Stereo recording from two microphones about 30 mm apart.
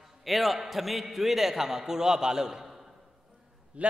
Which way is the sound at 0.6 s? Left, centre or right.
Centre.